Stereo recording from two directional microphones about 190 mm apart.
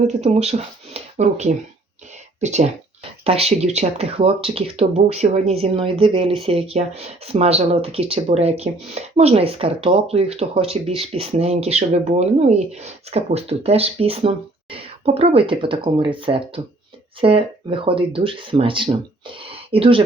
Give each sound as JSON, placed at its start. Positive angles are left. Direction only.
{"t": 0.1, "sound": "speech", "side_deg": -35}